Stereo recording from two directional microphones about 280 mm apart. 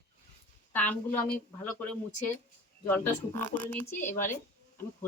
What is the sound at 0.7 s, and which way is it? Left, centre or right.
Speech, centre.